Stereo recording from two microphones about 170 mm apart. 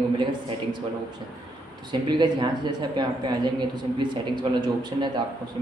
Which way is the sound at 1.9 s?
25° right (ahead or behind).